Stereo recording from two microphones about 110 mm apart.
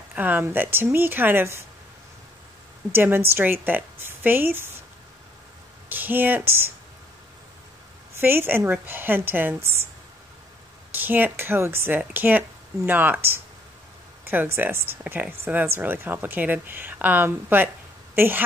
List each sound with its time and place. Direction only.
0.1 s speech: 15° right (ahead or behind)
2.9 s speech: 20° right (ahead or behind)
5.9 s speech: 20° right (ahead or behind)
8.2 s speech: 20° right (ahead or behind)
10.9 s a woman's voice: 15° right (ahead or behind)